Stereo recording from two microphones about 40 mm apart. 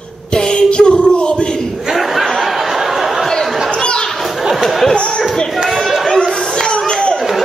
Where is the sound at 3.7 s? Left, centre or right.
Centre.